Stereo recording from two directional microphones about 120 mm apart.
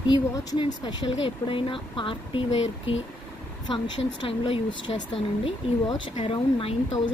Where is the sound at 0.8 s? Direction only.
45° left (ahead or behind).